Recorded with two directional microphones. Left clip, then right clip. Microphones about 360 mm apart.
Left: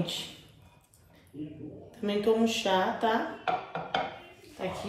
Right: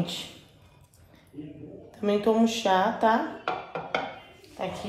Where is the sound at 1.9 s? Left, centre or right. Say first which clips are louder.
Right 3 dB; centre.